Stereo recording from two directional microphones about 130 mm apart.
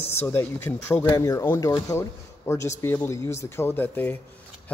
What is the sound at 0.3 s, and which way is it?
Speech, 15° left (ahead or behind).